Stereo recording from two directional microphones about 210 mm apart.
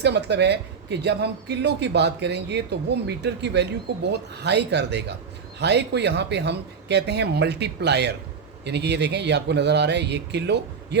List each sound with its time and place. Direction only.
0.0 s speech: 55° right (ahead or behind)